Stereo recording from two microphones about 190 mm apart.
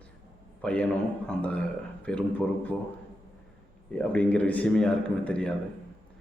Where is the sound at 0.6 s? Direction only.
5° left (ahead or behind).